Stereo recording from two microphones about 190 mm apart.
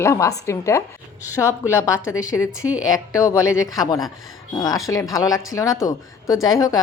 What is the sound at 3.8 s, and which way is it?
A woman's voice, 20° left (ahead or behind).